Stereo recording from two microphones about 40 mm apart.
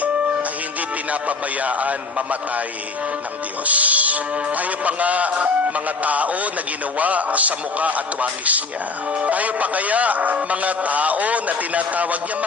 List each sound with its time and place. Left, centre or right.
1.1 s a man's voice: right
3.7 s a man's voice: right